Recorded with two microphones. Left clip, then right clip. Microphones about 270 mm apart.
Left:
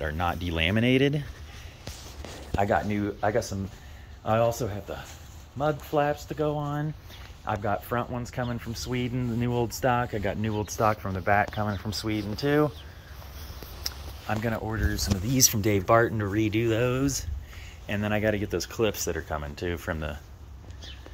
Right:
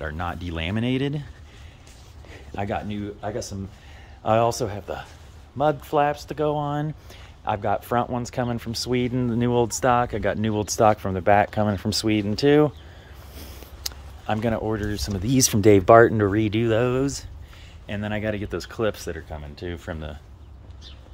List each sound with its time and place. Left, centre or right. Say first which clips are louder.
0.0 s speech: left 1 dB; centre
2.5 s speech: left 4 dB; centre
2.9 s speech: left 4 dB; centre
4.2 s speech: right 4 dB; centre